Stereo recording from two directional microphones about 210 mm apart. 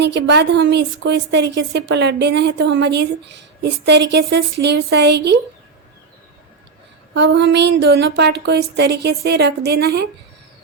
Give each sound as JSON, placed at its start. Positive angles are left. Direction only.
{"t": 0.0, "sound": "speech", "side_deg": -55}
{"t": 7.1, "sound": "a woman's voice", "side_deg": -55}